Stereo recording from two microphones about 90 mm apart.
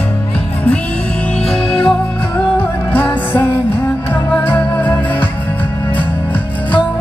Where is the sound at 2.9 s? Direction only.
15° left (ahead or behind).